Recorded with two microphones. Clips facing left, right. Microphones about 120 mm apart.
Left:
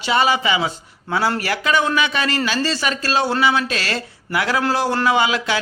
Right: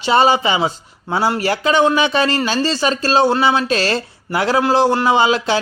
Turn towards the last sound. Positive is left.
turn(degrees=-30)  # may be behind; listen again after turning